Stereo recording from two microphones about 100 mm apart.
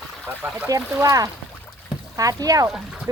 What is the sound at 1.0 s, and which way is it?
Speech, 35° right (ahead or behind).